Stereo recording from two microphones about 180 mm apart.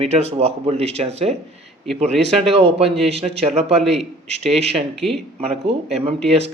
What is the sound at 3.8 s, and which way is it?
Speech, centre (ahead or behind).